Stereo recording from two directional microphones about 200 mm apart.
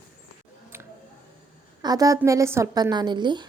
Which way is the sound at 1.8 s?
20° right (ahead or behind).